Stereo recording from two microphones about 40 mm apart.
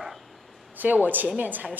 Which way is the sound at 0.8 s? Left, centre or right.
Right.